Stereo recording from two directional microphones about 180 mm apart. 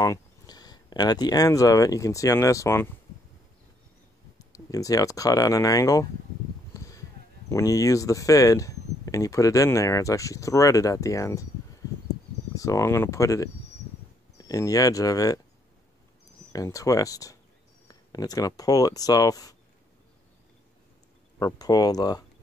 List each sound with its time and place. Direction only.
0.0 s speech: 20° left (ahead or behind)
4.4 s speech: 20° left (ahead or behind)
6.7 s a sound: 20° left (ahead or behind)
7.5 s speech: 20° left (ahead or behind)
12.5 s speech: 15° left (ahead or behind)
16.5 s speech: 20° left (ahead or behind)
21.4 s speech: 20° left (ahead or behind)